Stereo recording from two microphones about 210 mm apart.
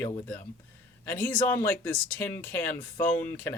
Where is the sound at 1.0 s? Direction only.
10° left (ahead or behind).